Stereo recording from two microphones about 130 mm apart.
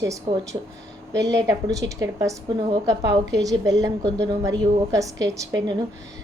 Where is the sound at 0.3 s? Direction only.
35° right (ahead or behind).